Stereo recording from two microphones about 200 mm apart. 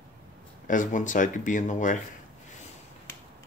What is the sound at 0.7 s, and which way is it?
Speech, 40° left (ahead or behind).